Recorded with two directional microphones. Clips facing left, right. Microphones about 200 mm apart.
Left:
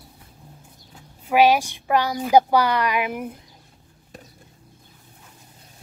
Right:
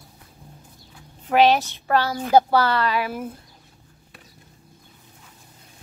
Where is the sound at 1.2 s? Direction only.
10° left (ahead or behind).